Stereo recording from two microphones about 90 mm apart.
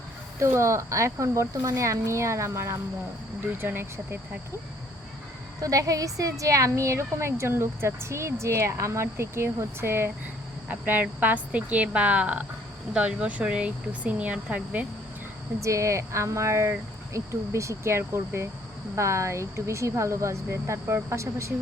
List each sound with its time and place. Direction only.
0.3 s speech: 30° right (ahead or behind)
5.5 s speech: 40° right (ahead or behind); by 14.8 s 15° right (ahead or behind)
15.6 s speech: 35° right (ahead or behind)